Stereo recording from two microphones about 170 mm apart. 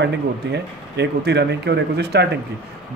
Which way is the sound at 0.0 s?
85° right.